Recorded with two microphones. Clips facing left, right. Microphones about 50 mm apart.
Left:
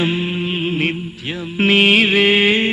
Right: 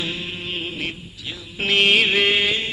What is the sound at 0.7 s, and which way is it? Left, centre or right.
Music, left.